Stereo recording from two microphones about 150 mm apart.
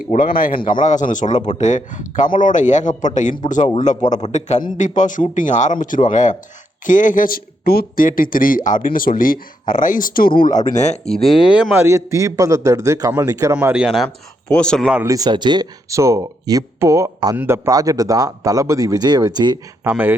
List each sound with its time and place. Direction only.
0.3 s speech: 70° left (ahead or behind)
0.7 s a man's voice: 55° left (ahead or behind)
11.7 s speech: 15° right (ahead or behind)
13.8 s speech: centre (ahead or behind)
15.0 s speech: 25° right (ahead or behind)
19.8 s speech: 15° right (ahead or behind)